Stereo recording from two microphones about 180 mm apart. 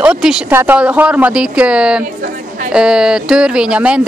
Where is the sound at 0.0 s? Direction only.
5° right (ahead or behind).